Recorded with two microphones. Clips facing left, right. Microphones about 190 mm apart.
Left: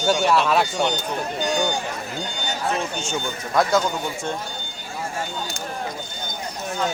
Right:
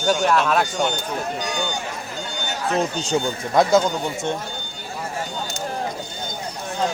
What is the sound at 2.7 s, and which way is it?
Speech, 35° right (ahead or behind).